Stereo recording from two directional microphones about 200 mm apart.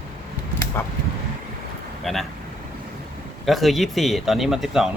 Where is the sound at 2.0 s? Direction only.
Centre (ahead or behind).